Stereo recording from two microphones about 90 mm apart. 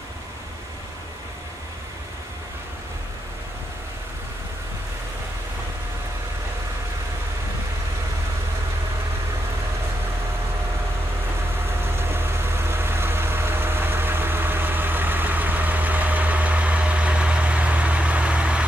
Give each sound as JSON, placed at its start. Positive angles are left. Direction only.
{"t": 11.8, "sound": "vehicle", "side_deg": -25}